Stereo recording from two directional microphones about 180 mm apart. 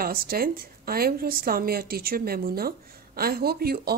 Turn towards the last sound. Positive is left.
turn(degrees=-60)  # may be behind; listen again after turning